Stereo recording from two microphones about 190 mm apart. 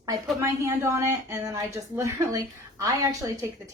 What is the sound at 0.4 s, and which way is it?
Speech, 15° right (ahead or behind).